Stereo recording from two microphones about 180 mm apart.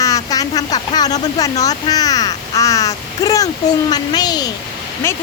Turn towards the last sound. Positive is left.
turn(degrees=15)  # may be behind; listen again after turning